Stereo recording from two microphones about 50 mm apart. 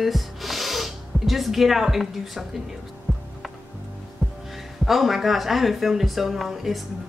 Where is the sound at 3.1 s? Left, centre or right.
Right.